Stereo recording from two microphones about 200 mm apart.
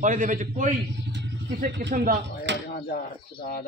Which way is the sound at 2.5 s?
60° right (ahead or behind).